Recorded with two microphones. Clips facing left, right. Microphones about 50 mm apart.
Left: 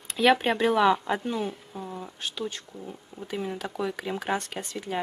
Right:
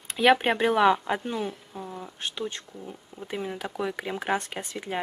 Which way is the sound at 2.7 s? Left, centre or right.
Centre.